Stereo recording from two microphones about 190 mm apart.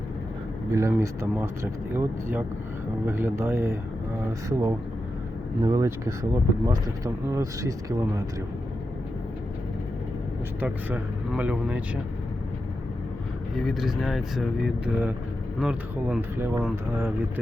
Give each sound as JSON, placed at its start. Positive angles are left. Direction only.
{"t": 0.7, "sound": "speech", "side_deg": -15}
{"t": 10.6, "sound": "speech", "side_deg": -10}
{"t": 13.6, "sound": "speech", "side_deg": 0}
{"t": 16.4, "sound": "speech", "side_deg": -15}